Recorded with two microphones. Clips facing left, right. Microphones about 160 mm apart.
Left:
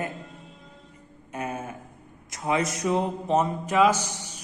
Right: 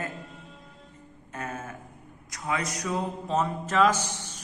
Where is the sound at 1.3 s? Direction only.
15° left (ahead or behind).